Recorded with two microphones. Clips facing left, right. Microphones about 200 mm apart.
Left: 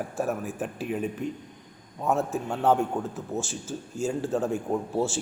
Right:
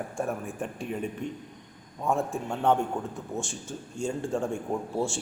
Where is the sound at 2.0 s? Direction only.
5° left (ahead or behind).